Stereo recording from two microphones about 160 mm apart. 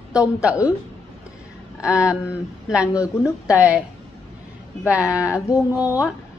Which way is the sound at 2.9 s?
20° left (ahead or behind).